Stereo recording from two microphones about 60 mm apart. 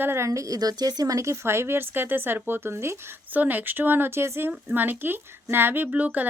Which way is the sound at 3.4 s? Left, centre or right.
Right.